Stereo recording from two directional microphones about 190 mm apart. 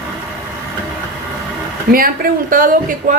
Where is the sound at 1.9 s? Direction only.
50° right (ahead or behind).